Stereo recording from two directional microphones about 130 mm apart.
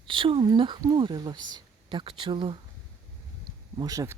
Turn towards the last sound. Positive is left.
turn(degrees=-25)  # may be behind; listen again after turning